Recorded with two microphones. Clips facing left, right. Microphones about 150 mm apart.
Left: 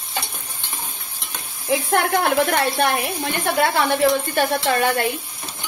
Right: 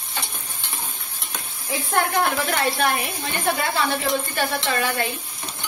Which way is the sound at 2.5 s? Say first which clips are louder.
Left 3 dB; 55° left (ahead or behind).